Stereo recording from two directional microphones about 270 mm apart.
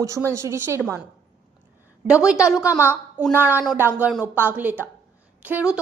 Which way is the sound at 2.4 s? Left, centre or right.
Centre.